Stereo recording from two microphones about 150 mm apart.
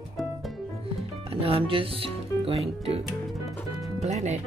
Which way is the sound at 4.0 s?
50° right (ahead or behind).